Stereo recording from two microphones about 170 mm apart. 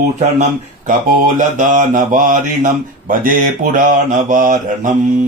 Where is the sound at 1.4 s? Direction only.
50° right (ahead or behind).